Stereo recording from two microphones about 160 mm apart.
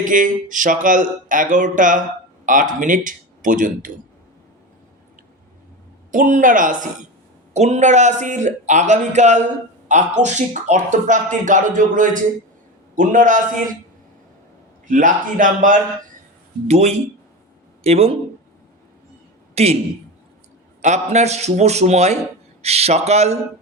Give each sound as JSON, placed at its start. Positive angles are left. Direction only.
{"t": 0.0, "sound": "speech", "side_deg": -55}
{"t": 6.1, "sound": "speech", "side_deg": -55}
{"t": 7.5, "sound": "speech", "side_deg": -45}
{"t": 14.8, "sound": "speech", "side_deg": -55}
{"t": 16.6, "sound": "speech", "side_deg": -45}
{"t": 19.5, "sound": "a man's voice", "side_deg": -40}
{"t": 20.8, "sound": "speech", "side_deg": -45}